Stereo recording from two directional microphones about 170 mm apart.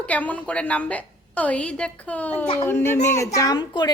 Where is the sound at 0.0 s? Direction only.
10° left (ahead or behind).